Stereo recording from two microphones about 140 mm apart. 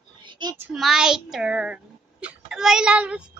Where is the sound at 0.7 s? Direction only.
Centre (ahead or behind).